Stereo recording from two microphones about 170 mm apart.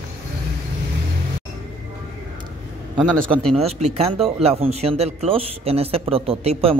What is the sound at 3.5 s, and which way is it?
Speech, 35° right (ahead or behind).